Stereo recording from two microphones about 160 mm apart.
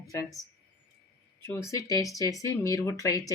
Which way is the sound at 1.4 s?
15° left (ahead or behind).